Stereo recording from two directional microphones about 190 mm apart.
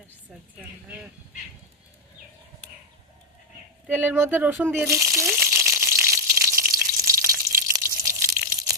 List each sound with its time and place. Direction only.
3.8 s crumpling: 10° right (ahead or behind)
6.7 s frying: 15° right (ahead or behind)
7.7 s a sound: 15° right (ahead or behind)